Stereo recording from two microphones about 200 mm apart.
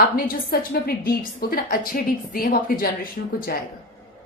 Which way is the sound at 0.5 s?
50° left (ahead or behind).